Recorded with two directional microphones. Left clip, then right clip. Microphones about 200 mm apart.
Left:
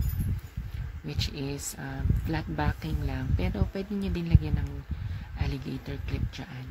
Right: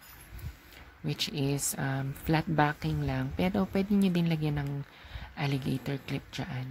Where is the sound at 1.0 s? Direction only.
25° right (ahead or behind).